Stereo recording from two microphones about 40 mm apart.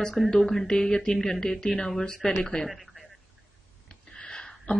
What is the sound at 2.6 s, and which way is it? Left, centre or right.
Speech, centre.